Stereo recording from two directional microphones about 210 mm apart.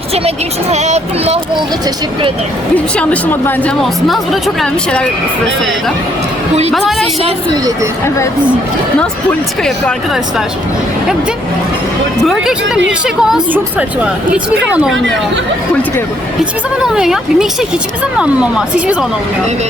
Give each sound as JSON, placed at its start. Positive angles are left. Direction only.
{"t": 0.1, "sound": "speech", "side_deg": -30}
{"t": 2.7, "sound": "a woman's voice", "side_deg": 5}
{"t": 6.7, "sound": "a woman's voice", "side_deg": 0}
{"t": 7.2, "sound": "a woman's voice", "side_deg": -25}
{"t": 12.2, "sound": "a woman's voice", "side_deg": 0}
{"t": 16.8, "sound": "a woman's voice", "side_deg": -5}